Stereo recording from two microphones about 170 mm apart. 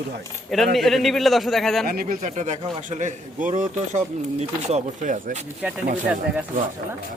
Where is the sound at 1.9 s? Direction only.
60° right (ahead or behind).